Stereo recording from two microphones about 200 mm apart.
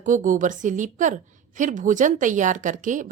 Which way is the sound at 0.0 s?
40° right (ahead or behind).